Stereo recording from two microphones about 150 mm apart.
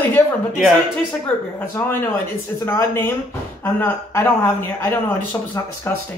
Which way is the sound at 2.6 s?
15° left (ahead or behind).